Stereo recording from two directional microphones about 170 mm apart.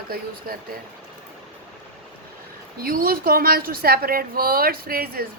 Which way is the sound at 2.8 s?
60° right (ahead or behind).